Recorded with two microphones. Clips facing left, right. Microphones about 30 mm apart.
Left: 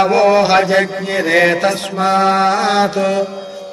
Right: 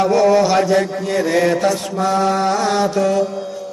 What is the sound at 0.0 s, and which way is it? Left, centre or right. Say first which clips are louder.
Mantra: left 2 dB; left.